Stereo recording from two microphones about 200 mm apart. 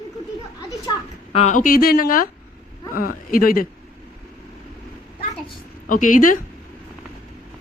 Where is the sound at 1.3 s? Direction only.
35° left (ahead or behind).